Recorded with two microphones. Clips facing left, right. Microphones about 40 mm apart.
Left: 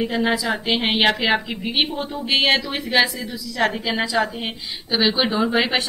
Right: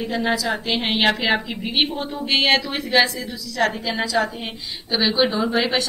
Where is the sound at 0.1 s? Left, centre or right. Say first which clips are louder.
Left 1 dB; centre.